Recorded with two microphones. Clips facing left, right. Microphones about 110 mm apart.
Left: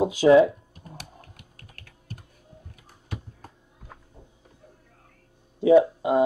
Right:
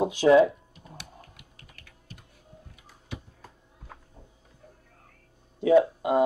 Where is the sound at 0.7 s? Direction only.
45° left (ahead or behind).